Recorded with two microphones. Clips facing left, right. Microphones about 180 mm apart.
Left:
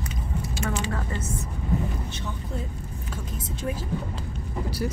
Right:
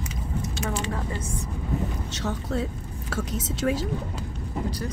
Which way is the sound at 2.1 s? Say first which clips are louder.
Right 5 dB; 90° right.